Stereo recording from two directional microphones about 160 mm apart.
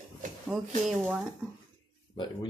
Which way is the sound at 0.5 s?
Centre (ahead or behind).